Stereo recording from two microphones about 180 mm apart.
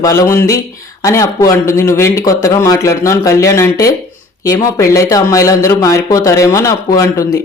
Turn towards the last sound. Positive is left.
turn(degrees=20)  # may be behind; listen again after turning